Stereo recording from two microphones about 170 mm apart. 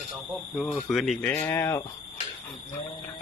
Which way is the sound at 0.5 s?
Centre (ahead or behind).